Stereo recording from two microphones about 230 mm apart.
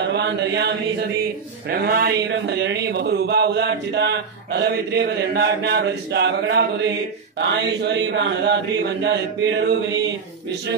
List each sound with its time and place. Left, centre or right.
0.0 s mantra: right
1.7 s speech: right